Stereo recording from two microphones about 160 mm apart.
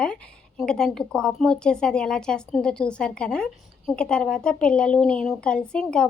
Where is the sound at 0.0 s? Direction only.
5° left (ahead or behind).